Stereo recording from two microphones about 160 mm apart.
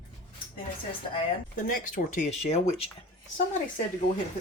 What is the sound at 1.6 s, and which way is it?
Speech, 55° left (ahead or behind).